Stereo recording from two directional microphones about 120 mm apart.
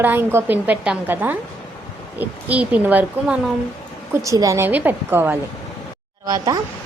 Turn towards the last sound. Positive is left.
turn(degrees=-30)  # may be behind; listen again after turning